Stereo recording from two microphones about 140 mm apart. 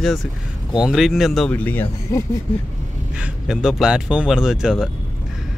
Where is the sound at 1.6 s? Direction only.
15° left (ahead or behind).